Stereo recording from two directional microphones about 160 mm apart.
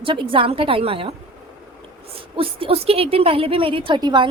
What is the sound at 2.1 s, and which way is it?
A woman's voice, 35° right (ahead or behind).